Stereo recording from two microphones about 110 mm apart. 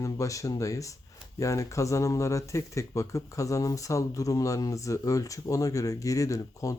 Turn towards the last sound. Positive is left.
turn(degrees=30)  # may be behind; listen again after turning